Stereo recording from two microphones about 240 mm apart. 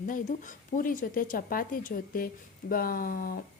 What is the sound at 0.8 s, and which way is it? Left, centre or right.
Speech, left.